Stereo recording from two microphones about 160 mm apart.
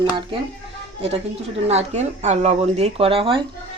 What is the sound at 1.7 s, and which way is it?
Speech, 45° right (ahead or behind).